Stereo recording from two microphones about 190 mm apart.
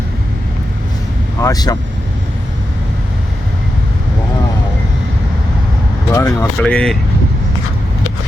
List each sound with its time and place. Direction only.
1.4 s speech: 20° left (ahead or behind)
6.1 s speech: 15° left (ahead or behind)